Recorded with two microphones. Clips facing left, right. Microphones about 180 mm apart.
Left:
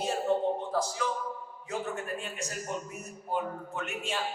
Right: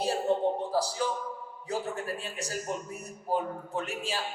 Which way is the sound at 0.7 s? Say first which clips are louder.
Right 2 dB; 35° right (ahead or behind).